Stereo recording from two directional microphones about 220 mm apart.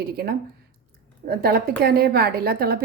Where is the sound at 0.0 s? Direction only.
45° right (ahead or behind).